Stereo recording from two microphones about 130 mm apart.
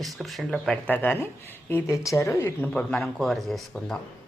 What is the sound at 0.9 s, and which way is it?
Speech, 15° left (ahead or behind).